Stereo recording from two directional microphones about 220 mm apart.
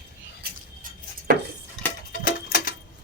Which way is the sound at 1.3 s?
45° right (ahead or behind).